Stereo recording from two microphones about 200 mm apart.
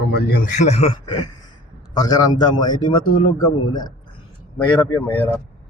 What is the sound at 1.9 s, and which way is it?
A man's voice, 20° left (ahead or behind).